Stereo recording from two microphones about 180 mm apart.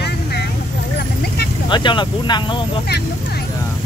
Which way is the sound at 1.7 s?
25° left (ahead or behind).